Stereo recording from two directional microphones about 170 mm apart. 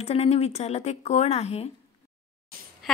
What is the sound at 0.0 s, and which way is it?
Speech, 35° left (ahead or behind).